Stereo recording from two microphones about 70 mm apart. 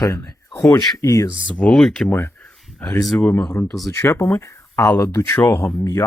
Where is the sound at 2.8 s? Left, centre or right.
Left.